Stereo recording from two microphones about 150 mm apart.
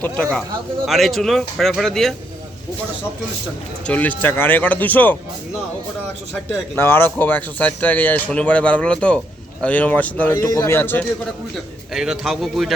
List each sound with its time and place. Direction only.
0.0 s speech: 5° left (ahead or behind)
3.8 s speech: 10° left (ahead or behind)
6.7 s speech: 15° left (ahead or behind)
11.9 s speech: 5° right (ahead or behind)